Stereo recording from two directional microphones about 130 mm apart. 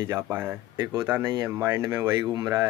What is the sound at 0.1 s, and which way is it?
Speech, 15° right (ahead or behind).